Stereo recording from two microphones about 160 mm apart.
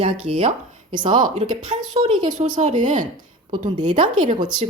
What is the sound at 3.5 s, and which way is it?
Speech, 30° right (ahead or behind).